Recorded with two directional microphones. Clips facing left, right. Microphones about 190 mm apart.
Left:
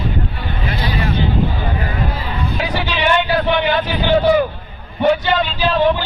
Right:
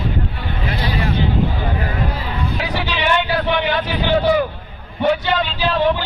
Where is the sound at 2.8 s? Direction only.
50° left (ahead or behind).